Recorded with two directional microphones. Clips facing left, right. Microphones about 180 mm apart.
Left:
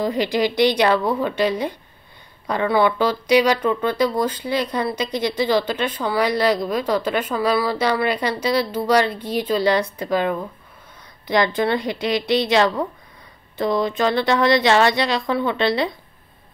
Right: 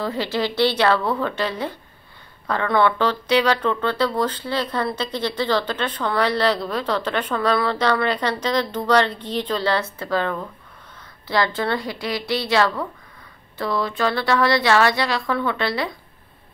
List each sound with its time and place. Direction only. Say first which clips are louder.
0.0 s a woman's voice: left 4 dB; 15° left (ahead or behind)